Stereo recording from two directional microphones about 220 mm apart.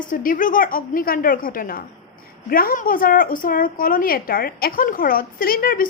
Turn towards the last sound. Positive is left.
turn(degrees=40)  # may be behind; listen again after turning